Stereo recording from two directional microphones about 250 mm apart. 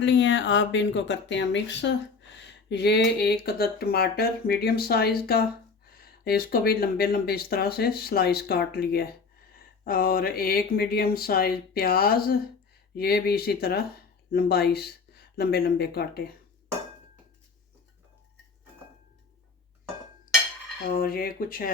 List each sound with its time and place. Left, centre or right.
0.0 s speech: left
20.8 s speech: left